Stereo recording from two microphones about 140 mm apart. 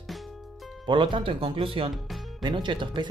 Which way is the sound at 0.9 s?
35° right (ahead or behind).